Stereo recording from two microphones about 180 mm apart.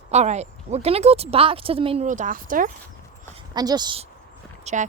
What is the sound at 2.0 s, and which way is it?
Speech, 45° right (ahead or behind).